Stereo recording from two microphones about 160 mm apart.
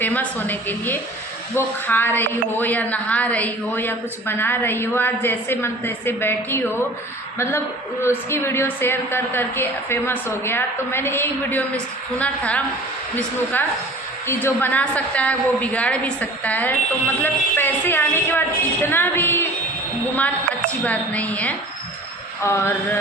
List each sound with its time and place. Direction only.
0.0 s a woman's voice: 10° left (ahead or behind)
8.0 s a woman's voice: 15° left (ahead or behind)
20.8 s a woman's voice: 10° left (ahead or behind)